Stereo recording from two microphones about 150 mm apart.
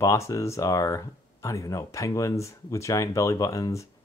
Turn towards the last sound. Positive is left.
turn(degrees=20)  # may be behind; listen again after turning